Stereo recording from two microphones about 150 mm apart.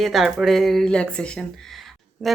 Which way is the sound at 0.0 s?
Centre (ahead or behind).